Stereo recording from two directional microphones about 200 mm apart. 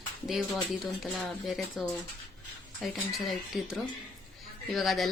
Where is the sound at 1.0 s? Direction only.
Centre (ahead or behind).